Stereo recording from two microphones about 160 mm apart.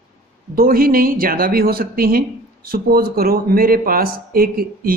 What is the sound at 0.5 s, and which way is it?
Speech, 65° right (ahead or behind).